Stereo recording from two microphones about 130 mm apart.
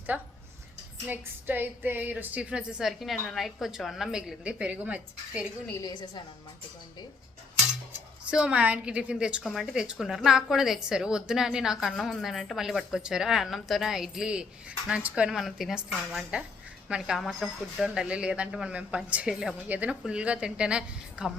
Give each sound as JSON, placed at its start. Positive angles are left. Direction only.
{"t": 0.1, "sound": "a woman's voice", "side_deg": -10}
{"t": 5.8, "sound": "a woman's voice", "side_deg": 35}
{"t": 8.3, "sound": "a woman's voice", "side_deg": -10}